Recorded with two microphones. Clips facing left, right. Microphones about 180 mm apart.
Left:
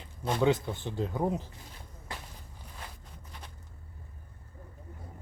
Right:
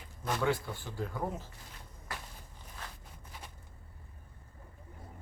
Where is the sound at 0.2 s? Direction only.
25° left (ahead or behind).